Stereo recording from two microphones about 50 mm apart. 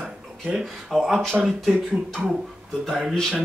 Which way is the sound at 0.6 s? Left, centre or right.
Centre.